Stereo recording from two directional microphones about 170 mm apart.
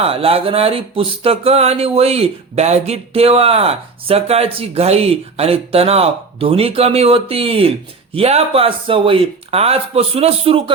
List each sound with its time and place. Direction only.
0.0 s speech: 35° right (ahead or behind)